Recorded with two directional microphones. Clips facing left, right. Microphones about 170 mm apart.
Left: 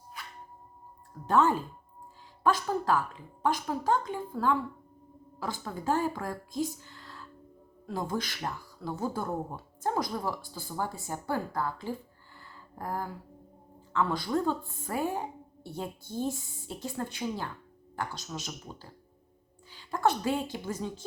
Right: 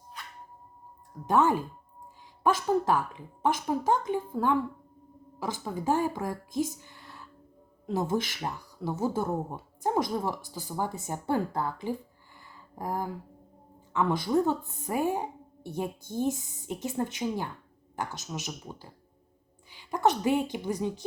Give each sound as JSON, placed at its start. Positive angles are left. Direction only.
{"t": 1.3, "sound": "a woman's voice", "side_deg": -15}
{"t": 12.4, "sound": "a sound", "side_deg": -15}
{"t": 13.9, "sound": "a woman's voice", "side_deg": -20}